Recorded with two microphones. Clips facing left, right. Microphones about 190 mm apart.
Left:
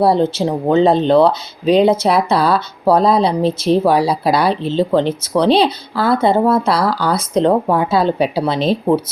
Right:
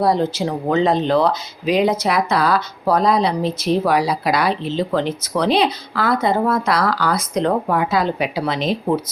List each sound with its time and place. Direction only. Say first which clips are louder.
0.0 s speech: left 4 dB; 30° left (ahead or behind)